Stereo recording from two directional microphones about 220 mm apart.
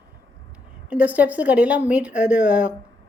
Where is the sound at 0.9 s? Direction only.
5° right (ahead or behind).